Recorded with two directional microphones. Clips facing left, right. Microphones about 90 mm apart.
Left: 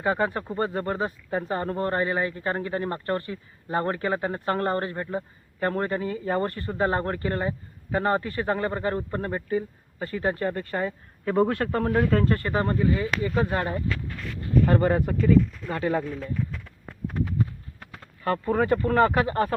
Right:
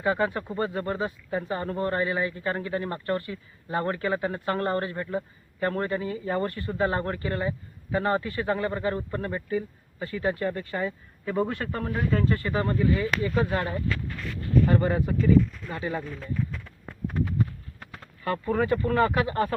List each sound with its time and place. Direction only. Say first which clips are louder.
0.0 s speech: left 1 dB; 35° left (ahead or behind)
11.3 s speech: left 5 dB; 65° left (ahead or behind); by 13.8 s 30° left (ahead or behind)
14.7 s speech: left 2 dB; 50° left (ahead or behind)
18.2 s speech: left 2 dB; 35° left (ahead or behind)